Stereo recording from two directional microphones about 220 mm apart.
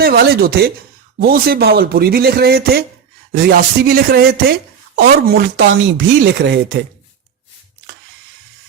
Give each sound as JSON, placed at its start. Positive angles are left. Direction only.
{"t": 0.0, "sound": "speech", "side_deg": -45}